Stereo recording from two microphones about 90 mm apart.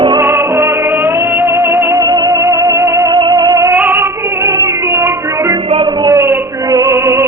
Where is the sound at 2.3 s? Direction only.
30° right (ahead or behind).